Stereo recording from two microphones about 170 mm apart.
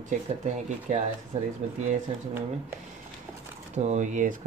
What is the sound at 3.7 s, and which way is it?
Speech, 45° right (ahead or behind).